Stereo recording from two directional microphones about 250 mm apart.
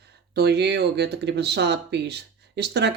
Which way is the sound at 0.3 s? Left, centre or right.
Right.